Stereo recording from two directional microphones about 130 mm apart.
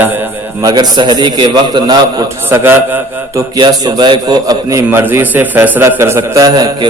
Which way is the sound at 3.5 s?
30° right (ahead or behind).